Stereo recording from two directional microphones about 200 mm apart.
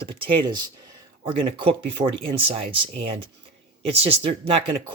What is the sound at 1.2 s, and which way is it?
Speech, 25° right (ahead or behind).